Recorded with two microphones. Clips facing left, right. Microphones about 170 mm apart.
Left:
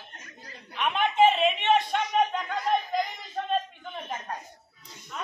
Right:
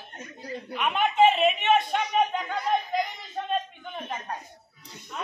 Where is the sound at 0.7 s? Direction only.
5° right (ahead or behind).